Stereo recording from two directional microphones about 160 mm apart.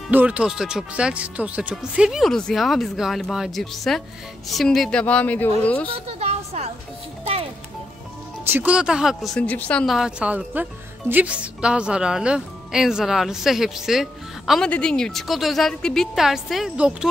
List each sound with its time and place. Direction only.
0.1 s a woman's voice: 10° right (ahead or behind); by 5.9 s 10° left (ahead or behind)
6.0 s a sound: 40° right (ahead or behind)
8.5 s a woman's voice: 10° right (ahead or behind)